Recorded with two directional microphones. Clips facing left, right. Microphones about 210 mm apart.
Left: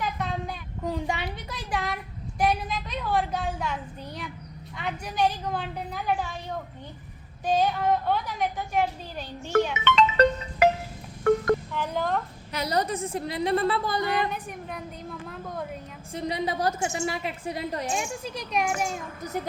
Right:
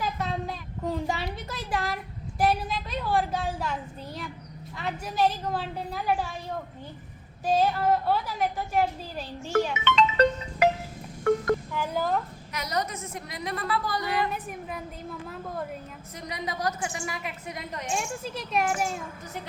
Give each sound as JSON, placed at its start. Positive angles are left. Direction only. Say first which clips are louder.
{"t": 0.0, "sound": "a sound", "louder": "even", "side_deg": 0}
{"t": 2.4, "sound": "a child's voice", "louder": "even", "side_deg": -5}
{"t": 9.8, "sound": "music", "louder": "even", "side_deg": 60}
{"t": 11.7, "sound": "a woman's voice", "louder": "even", "side_deg": -5}
{"t": 12.5, "sound": "a woman's voice", "louder": "left 4 dB", "side_deg": 30}
{"t": 14.3, "sound": "a woman's voice", "louder": "even", "side_deg": 0}
{"t": 16.1, "sound": "a woman's voice", "louder": "left 6 dB", "side_deg": 30}
{"t": 17.9, "sound": "a woman's voice", "louder": "even", "side_deg": 0}